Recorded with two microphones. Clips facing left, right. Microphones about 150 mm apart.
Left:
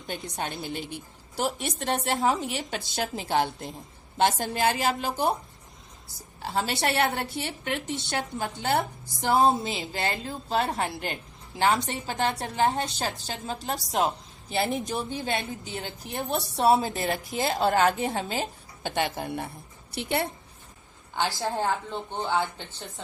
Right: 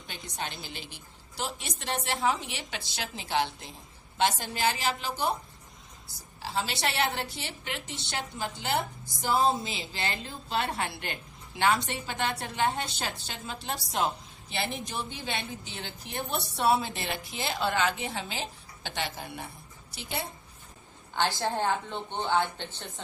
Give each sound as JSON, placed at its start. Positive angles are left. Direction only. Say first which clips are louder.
{"t": 0.1, "sound": "a woman's voice", "louder": "left 5 dB", "side_deg": 50}
{"t": 6.5, "sound": "a woman's voice", "louder": "left 4 dB", "side_deg": 45}
{"t": 10.5, "sound": "a woman's voice", "louder": "left 4 dB", "side_deg": 35}
{"t": 15.1, "sound": "a woman's voice", "louder": "left 6 dB", "side_deg": 45}
{"t": 19.9, "sound": "a woman's voice", "louder": "left 8 dB", "side_deg": 60}
{"t": 21.2, "sound": "speech", "louder": "left 1 dB", "side_deg": 5}